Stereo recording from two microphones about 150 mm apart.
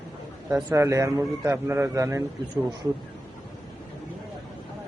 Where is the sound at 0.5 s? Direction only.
20° right (ahead or behind).